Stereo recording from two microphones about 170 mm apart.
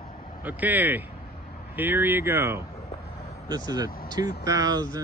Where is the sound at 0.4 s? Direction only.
10° right (ahead or behind).